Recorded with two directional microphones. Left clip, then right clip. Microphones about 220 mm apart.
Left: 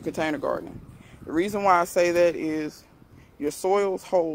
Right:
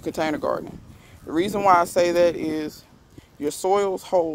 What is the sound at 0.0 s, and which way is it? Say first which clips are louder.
Speech: right 2 dB; 20° right (ahead or behind).